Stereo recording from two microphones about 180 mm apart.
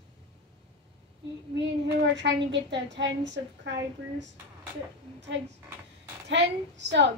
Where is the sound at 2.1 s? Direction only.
75° right (ahead or behind).